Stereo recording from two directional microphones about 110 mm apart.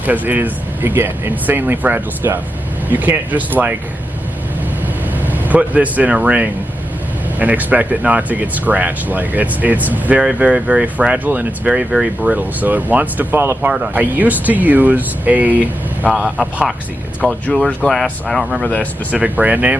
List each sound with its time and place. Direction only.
0.0 s speech: 15° right (ahead or behind)
5.2 s speech: 15° right (ahead or behind)
17.4 s speech: 10° left (ahead or behind)
19.1 s speech: 10° right (ahead or behind)